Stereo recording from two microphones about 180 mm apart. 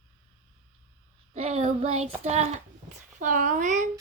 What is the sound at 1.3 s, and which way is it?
Child singing, 35° right (ahead or behind).